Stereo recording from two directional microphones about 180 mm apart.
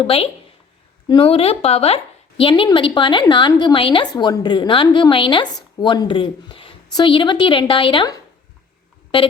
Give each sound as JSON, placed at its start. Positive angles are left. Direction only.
{"t": 0.0, "sound": "a woman's voice", "side_deg": 30}
{"t": 9.1, "sound": "a woman's voice", "side_deg": 30}